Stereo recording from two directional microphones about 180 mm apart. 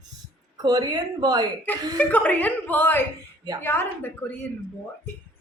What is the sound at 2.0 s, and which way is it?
A woman's voice, 10° left (ahead or behind).